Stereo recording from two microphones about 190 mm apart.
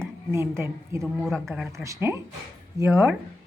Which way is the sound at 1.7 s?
15° right (ahead or behind).